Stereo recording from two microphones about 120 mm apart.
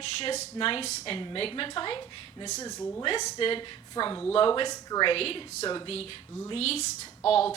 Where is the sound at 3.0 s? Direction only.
45° left (ahead or behind).